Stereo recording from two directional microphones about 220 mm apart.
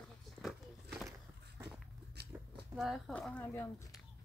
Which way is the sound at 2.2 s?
50° right (ahead or behind).